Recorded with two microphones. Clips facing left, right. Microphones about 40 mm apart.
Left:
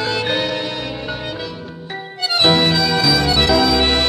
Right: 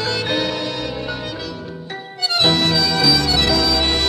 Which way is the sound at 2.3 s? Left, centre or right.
Centre.